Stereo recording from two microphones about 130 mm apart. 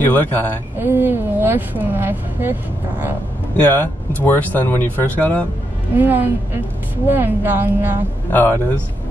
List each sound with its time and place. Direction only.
0.1 s speech: 15° left (ahead or behind)
0.7 s speech: 20° right (ahead or behind)
3.6 s speech: 15° left (ahead or behind)
5.9 s speech: 15° right (ahead or behind)
8.3 s speech: 15° left (ahead or behind)